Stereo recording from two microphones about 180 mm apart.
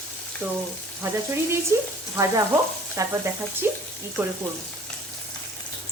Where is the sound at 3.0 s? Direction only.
15° right (ahead or behind).